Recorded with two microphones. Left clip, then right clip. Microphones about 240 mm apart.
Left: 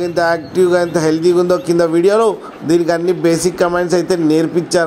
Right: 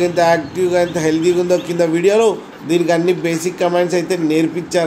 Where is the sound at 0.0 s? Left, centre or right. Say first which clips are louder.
Right 2 dB; left.